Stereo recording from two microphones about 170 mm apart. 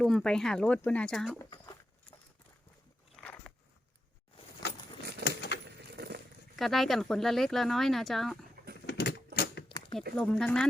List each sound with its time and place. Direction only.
0.0 s speech: 5° left (ahead or behind)
1.5 s a sound: 25° left (ahead or behind)
3.2 s biting: 5° left (ahead or behind)
5.5 s a sound: 90° left
5.9 s vehicle: 70° right (ahead or behind)
6.6 s speech: centre (ahead or behind)
8.9 s typewriter: 75° left (ahead or behind)
9.6 s a sound: 30° left (ahead or behind)
10.2 s speech: 5° left (ahead or behind)